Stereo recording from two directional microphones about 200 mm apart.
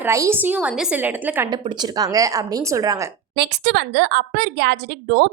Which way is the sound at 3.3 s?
55° right (ahead or behind).